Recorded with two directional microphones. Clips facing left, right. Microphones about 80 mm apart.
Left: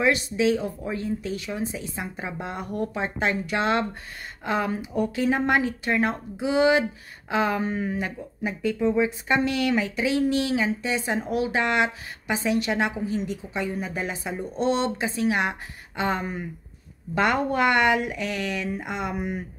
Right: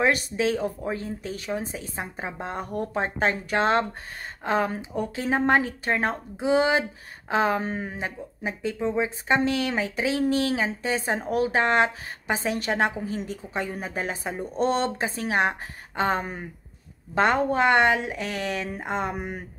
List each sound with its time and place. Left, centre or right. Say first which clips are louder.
0.0 s speech: left 1 dB; right